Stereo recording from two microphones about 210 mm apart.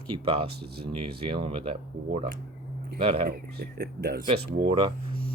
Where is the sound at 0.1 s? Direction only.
25° right (ahead or behind).